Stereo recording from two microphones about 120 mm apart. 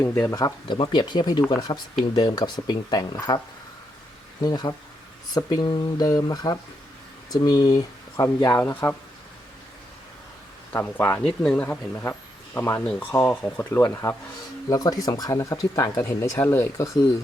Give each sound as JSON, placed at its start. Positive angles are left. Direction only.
{"t": 0.0, "sound": "speech", "side_deg": 20}
{"t": 8.6, "sound": "speech", "side_deg": 15}
{"t": 10.7, "sound": "speech", "side_deg": 20}